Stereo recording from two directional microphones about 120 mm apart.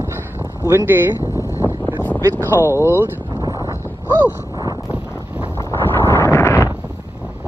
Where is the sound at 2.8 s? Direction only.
25° left (ahead or behind).